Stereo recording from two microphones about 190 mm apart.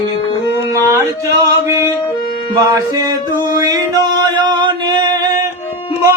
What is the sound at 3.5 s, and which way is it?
Male singing, 20° right (ahead or behind).